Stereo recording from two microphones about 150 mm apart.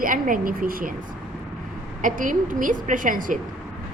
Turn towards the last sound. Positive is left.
turn(degrees=-65)  # may be behind; listen again after turning